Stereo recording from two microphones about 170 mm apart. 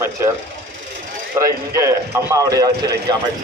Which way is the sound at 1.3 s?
20° right (ahead or behind).